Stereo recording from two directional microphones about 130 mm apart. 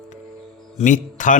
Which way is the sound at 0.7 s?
75° left (ahead or behind).